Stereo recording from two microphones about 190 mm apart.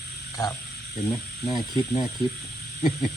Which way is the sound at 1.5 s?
20° left (ahead or behind).